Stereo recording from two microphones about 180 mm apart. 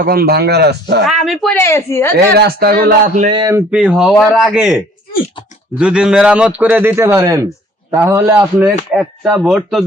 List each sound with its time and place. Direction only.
0.0 s a man's voice: 55° right (ahead or behind)
1.0 s speech: centre (ahead or behind)
1.5 s speech: 15° left (ahead or behind)
2.1 s a man's voice: 60° right (ahead or behind)
3.2 s speech: 30° right (ahead or behind)
3.5 s speech: 5° right (ahead or behind)
5.8 s a man's voice: 5° right (ahead or behind)